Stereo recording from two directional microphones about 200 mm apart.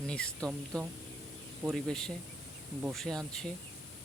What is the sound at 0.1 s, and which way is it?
Speech, 5° left (ahead or behind).